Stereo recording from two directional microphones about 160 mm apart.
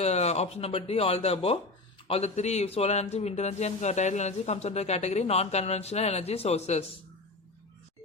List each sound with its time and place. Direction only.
0.0 s speech: 40° left (ahead or behind)